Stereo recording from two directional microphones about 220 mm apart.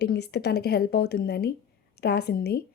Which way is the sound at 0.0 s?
50° left (ahead or behind).